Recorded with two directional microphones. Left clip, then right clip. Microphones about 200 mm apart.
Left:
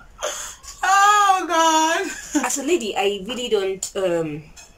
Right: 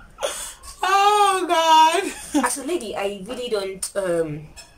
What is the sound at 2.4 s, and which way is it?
A woman's voice, 10° left (ahead or behind).